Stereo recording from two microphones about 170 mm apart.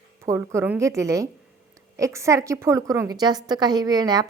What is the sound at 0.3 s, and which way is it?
A woman's voice, 15° right (ahead or behind).